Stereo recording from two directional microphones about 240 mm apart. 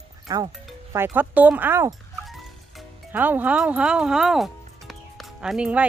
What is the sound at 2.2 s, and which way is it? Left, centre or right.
Music, centre.